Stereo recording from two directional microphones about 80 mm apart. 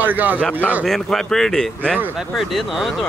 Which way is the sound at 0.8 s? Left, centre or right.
Centre.